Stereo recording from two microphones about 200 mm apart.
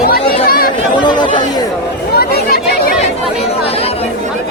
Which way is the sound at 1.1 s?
20° left (ahead or behind).